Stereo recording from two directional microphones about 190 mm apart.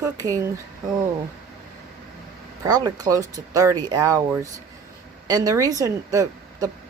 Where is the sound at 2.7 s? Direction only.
20° right (ahead or behind).